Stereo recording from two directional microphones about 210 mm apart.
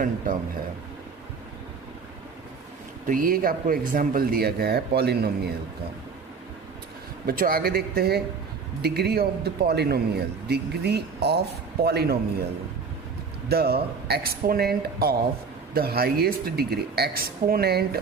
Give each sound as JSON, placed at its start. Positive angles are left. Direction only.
{"t": 3.1, "sound": "a man's voice", "side_deg": -40}
{"t": 7.3, "sound": "a man's voice", "side_deg": -45}
{"t": 13.5, "sound": "a man's voice", "side_deg": -50}